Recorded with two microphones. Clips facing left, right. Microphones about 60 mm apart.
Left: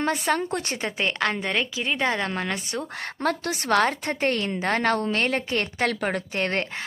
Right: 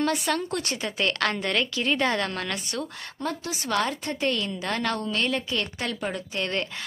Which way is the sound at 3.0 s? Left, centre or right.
Left.